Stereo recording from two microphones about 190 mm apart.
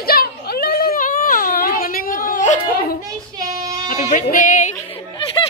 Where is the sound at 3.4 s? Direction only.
20° right (ahead or behind).